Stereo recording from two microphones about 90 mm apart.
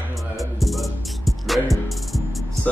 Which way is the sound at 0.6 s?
Centre (ahead or behind).